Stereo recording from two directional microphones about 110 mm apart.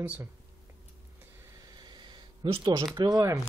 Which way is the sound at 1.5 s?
40° right (ahead or behind).